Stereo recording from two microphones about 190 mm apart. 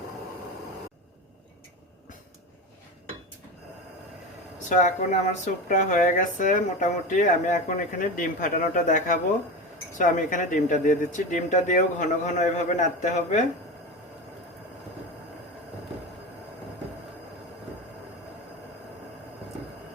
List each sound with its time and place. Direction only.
4.7 s speech: 40° left (ahead or behind)